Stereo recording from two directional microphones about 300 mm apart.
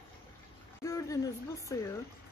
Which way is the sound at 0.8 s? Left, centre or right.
Centre.